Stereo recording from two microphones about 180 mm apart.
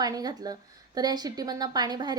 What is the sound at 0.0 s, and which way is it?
A woman's voice, 20° right (ahead or behind).